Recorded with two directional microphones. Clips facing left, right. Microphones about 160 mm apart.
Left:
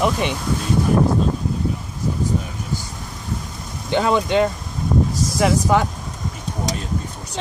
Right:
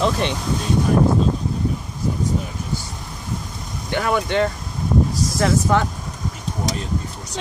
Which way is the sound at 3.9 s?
20° left (ahead or behind).